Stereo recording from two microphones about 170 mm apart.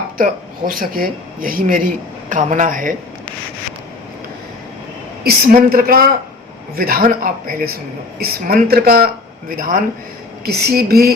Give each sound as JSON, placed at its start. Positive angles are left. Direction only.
{"t": 0.2, "sound": "speech", "side_deg": -55}
{"t": 5.2, "sound": "speech", "side_deg": -60}
{"t": 10.4, "sound": "speech", "side_deg": -65}